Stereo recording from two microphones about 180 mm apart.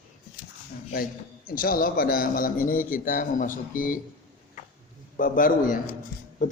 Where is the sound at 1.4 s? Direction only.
50° left (ahead or behind).